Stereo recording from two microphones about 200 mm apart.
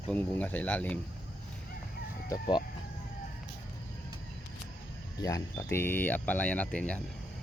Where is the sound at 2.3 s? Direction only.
20° left (ahead or behind).